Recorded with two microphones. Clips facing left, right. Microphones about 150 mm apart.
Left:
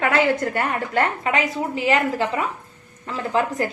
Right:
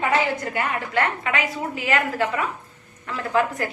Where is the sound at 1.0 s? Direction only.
35° left (ahead or behind).